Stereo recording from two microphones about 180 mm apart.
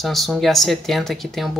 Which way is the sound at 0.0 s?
Centre (ahead or behind).